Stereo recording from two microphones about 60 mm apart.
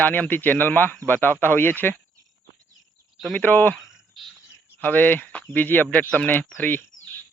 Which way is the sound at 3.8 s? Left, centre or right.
Centre.